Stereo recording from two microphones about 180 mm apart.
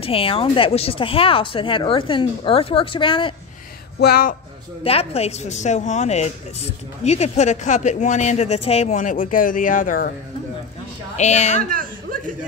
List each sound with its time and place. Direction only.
0.0 s speech: 30° left (ahead or behind)
4.0 s speech: 55° left (ahead or behind)
4.8 s a woman's voice: 35° left (ahead or behind); by 10.1 s 50° left (ahead or behind)
11.1 s a woman's voice: 40° left (ahead or behind)
11.7 s a sound: 50° right (ahead or behind)